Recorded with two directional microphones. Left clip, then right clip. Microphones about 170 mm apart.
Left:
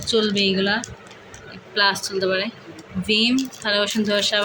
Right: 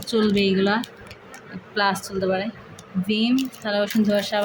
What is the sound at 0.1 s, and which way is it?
Speech, 15° right (ahead or behind).